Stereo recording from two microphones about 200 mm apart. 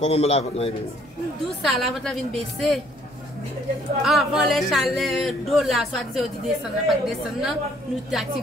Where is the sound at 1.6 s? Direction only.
Centre (ahead or behind).